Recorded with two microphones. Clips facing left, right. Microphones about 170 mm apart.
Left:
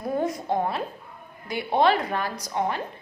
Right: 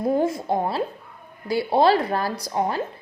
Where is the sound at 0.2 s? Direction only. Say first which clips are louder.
Right 3 dB; 30° right (ahead or behind).